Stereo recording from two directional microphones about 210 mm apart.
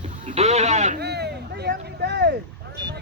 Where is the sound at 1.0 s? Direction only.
50° right (ahead or behind).